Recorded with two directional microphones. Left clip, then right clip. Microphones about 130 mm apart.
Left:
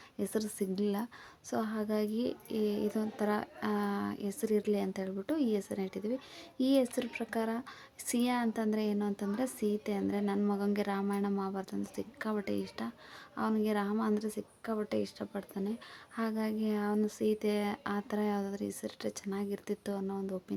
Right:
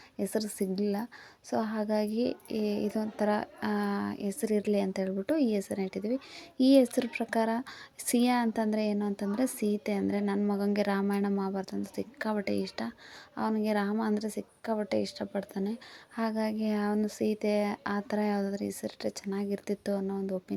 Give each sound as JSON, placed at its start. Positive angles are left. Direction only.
{"t": 0.2, "sound": "a woman's voice", "side_deg": -15}
{"t": 6.6, "sound": "a woman's voice", "side_deg": -30}